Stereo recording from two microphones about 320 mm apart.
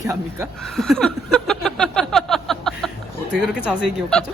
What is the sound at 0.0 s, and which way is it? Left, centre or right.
Speech, centre.